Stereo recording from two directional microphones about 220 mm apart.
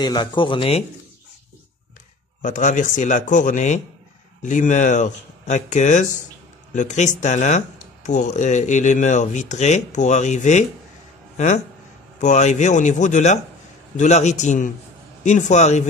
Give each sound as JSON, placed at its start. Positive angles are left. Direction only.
{"t": 0.0, "sound": "speech", "side_deg": 20}
{"t": 2.4, "sound": "speech", "side_deg": 35}